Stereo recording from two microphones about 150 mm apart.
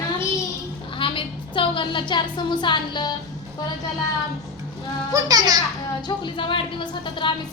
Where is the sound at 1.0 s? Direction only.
35° left (ahead or behind).